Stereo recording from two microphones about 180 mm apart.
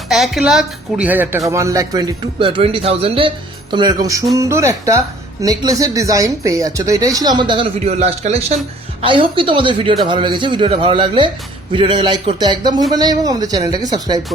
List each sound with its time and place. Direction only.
0.1 s speech: centre (ahead or behind); by 14.2 s 20° right (ahead or behind)